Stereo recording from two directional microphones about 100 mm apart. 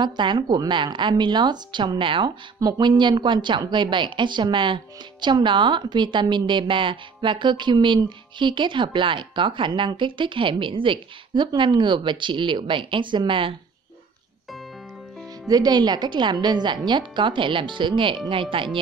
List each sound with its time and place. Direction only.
0.0 s a woman's voice: 50° right (ahead or behind)
2.6 s a woman's voice: 45° right (ahead or behind)
15.4 s a woman's voice: 40° right (ahead or behind); by 18.8 s 60° right (ahead or behind)